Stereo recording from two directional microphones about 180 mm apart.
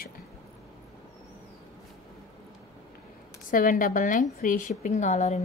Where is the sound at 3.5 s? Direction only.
50° left (ahead or behind).